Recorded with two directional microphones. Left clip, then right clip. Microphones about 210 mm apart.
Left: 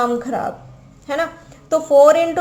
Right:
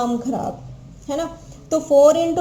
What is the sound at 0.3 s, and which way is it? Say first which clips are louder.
Speech: left 2 dB; 25° left (ahead or behind).